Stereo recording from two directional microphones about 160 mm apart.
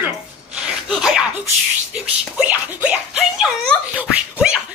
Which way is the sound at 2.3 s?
10° right (ahead or behind).